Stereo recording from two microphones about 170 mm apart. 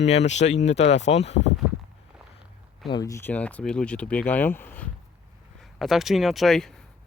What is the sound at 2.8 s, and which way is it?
Speech, 25° left (ahead or behind).